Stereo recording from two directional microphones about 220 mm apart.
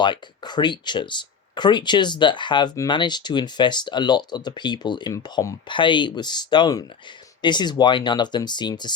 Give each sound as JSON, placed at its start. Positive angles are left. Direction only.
{"t": 0.0, "sound": "speech", "side_deg": 20}